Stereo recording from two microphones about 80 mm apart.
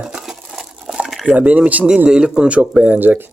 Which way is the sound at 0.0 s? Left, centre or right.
Centre.